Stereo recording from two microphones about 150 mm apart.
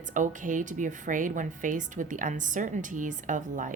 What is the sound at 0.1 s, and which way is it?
A woman's voice, 60° right (ahead or behind).